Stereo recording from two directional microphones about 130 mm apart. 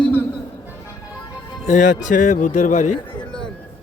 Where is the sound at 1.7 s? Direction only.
75° left (ahead or behind).